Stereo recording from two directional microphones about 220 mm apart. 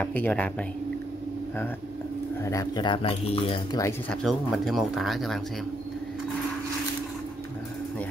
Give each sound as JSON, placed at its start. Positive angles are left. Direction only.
{"t": 0.0, "sound": "speech", "side_deg": 5}
{"t": 2.4, "sound": "speech", "side_deg": 15}
{"t": 3.8, "sound": "speech", "side_deg": 5}